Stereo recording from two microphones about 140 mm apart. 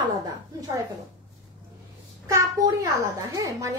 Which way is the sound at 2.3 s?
20° right (ahead or behind).